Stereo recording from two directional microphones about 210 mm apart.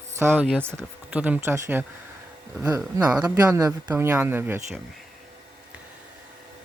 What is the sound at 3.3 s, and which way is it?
Speech, 15° right (ahead or behind).